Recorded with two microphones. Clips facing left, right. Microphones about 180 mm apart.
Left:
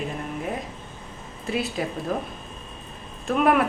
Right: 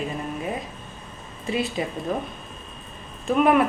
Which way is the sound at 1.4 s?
Centre (ahead or behind).